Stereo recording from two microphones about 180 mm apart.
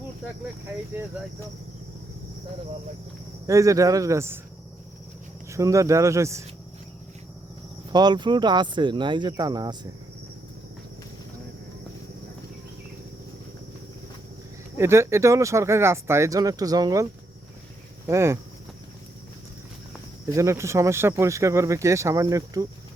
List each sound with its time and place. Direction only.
3.4 s speech: 15° right (ahead or behind)
5.5 s speech: 15° right (ahead or behind)
7.9 s speech: 25° right (ahead or behind)
14.8 s speech: 15° right (ahead or behind)
20.3 s speech: 15° right (ahead or behind)